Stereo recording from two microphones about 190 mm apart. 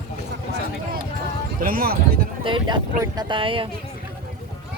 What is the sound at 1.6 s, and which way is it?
Speech, 50° right (ahead or behind).